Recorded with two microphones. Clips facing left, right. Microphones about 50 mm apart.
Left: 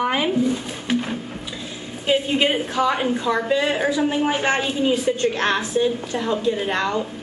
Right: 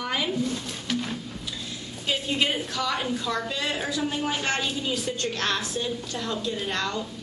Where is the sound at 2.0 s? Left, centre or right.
Left.